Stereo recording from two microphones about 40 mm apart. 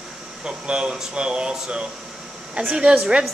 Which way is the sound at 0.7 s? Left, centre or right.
Right.